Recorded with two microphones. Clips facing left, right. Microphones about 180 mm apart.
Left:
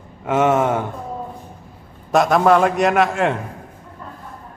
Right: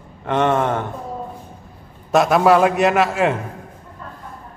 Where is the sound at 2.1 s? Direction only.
5° right (ahead or behind).